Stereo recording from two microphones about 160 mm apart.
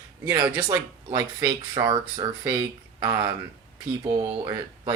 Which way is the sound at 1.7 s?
30° right (ahead or behind).